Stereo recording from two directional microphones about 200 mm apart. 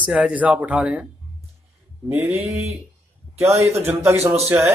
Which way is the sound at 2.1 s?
10° right (ahead or behind).